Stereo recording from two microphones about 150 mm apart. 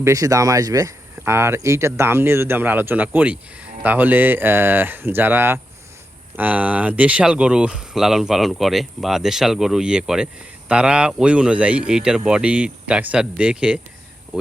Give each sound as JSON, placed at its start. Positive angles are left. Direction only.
{"t": 0.0, "sound": "speech", "side_deg": -20}